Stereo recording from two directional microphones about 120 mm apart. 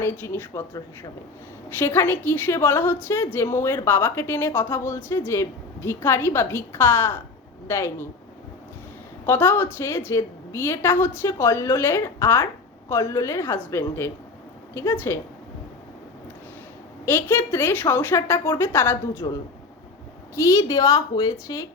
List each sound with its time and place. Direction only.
0.0 s a woman's voice: 20° left (ahead or behind)
1.8 s a woman's voice: 20° left (ahead or behind)
9.2 s a woman's voice: 20° left (ahead or behind)
17.1 s a woman's voice: 15° left (ahead or behind)
20.3 s a woman's voice: 25° left (ahead or behind)